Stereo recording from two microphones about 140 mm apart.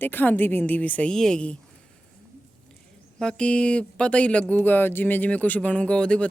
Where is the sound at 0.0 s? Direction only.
15° left (ahead or behind).